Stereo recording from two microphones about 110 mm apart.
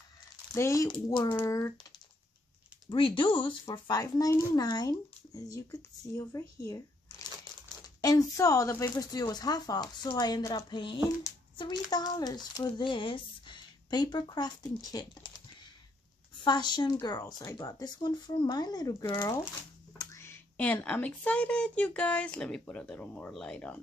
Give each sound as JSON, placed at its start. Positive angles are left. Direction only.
{"t": 0.6, "sound": "speech", "side_deg": 25}
{"t": 0.8, "sound": "speech", "side_deg": 50}
{"t": 1.4, "sound": "speech", "side_deg": 30}
{"t": 2.9, "sound": "speech", "side_deg": 50}
{"t": 3.7, "sound": "speech", "side_deg": 40}
{"t": 16.4, "sound": "speech", "side_deg": 40}
{"t": 20.0, "sound": "a sound", "side_deg": 25}
{"t": 20.5, "sound": "speech", "side_deg": 15}